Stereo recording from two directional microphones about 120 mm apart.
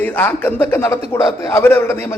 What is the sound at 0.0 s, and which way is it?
A man's voice, 15° left (ahead or behind).